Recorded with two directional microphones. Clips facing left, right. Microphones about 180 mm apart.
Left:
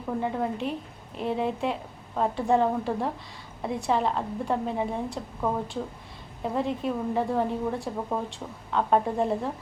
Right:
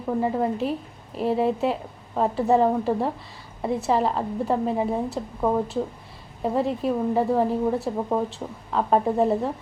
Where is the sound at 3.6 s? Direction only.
5° right (ahead or behind).